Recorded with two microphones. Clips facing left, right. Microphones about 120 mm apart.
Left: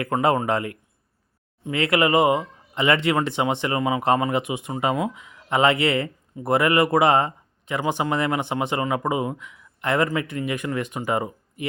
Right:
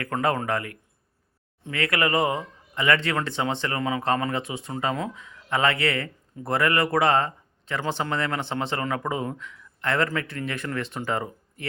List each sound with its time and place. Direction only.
0.0 s speech: 20° left (ahead or behind)